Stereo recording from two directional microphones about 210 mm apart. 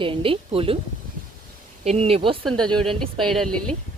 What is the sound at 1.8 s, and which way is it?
Speech, 30° right (ahead or behind).